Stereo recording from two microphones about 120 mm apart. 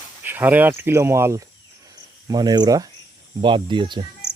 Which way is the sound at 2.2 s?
35° right (ahead or behind).